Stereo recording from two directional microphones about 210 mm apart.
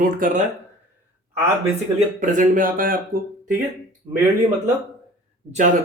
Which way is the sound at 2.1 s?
40° right (ahead or behind).